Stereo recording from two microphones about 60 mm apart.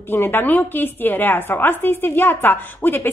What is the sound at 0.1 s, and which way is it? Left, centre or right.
A woman's voice, left.